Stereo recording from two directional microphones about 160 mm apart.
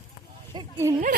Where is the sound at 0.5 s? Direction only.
25° right (ahead or behind).